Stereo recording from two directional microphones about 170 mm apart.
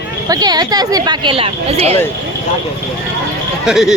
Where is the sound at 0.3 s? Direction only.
20° right (ahead or behind).